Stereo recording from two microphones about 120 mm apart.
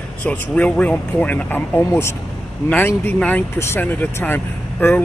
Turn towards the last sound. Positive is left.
turn(degrees=15)  # may be behind; listen again after turning